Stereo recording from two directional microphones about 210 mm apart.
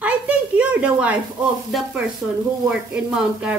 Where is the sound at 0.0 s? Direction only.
5° right (ahead or behind).